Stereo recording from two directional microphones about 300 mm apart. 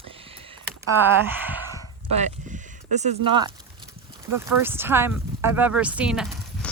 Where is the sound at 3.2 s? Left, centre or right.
Centre.